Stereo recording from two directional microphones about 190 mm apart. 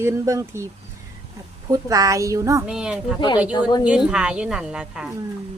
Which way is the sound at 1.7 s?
15° right (ahead or behind).